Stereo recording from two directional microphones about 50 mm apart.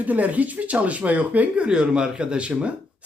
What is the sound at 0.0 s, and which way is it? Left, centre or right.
A man's voice, right.